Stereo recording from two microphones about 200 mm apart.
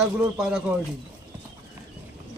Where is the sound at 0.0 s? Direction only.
5° right (ahead or behind).